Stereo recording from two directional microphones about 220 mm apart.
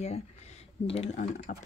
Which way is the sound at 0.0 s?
30° left (ahead or behind).